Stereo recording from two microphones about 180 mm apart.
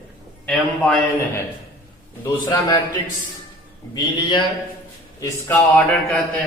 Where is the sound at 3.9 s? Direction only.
25° left (ahead or behind).